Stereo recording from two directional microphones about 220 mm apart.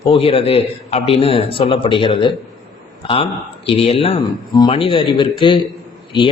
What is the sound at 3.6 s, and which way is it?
A man's voice, 25° left (ahead or behind).